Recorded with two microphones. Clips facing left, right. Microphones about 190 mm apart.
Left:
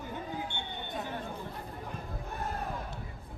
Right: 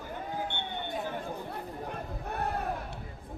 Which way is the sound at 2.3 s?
65° right (ahead or behind).